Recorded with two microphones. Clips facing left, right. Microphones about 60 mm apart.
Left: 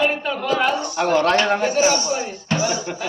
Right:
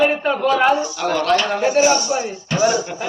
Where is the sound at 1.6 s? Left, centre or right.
Right.